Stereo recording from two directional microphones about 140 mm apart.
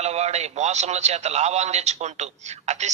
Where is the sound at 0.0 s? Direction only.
50° right (ahead or behind).